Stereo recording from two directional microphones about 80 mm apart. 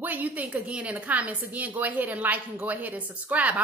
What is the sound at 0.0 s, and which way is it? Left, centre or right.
A woman's voice, right.